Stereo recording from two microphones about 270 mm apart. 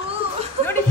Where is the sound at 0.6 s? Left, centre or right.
Right.